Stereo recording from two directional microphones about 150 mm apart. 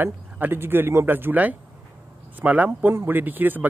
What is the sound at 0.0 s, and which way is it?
A man's voice, 15° right (ahead or behind).